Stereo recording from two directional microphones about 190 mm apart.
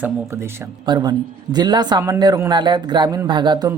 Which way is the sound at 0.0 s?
15° right (ahead or behind).